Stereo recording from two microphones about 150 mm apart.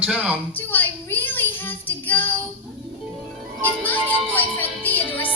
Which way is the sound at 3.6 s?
10° left (ahead or behind).